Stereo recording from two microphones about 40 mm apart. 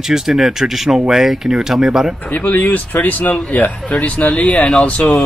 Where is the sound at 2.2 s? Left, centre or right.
Left.